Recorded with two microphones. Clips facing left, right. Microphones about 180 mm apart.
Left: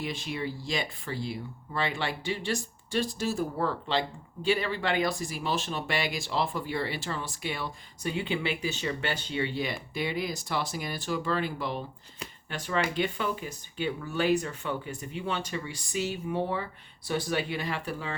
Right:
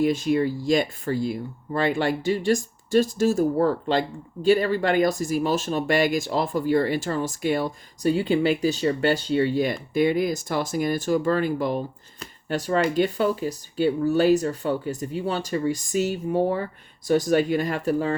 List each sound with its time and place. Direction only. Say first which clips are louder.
0.0 s speech: right 13 dB; 45° right (ahead or behind)